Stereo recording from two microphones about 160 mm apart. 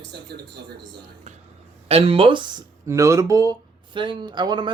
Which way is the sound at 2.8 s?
20° right (ahead or behind).